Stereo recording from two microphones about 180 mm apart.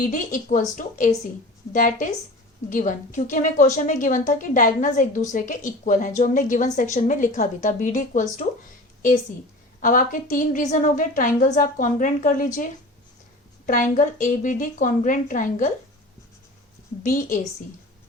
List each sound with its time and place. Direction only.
0.1 s a woman's voice: 45° left (ahead or behind)
9.8 s a woman's voice: 50° left (ahead or behind)
13.9 s a woman's voice: 45° left (ahead or behind)
17.0 s a woman's voice: 50° left (ahead or behind)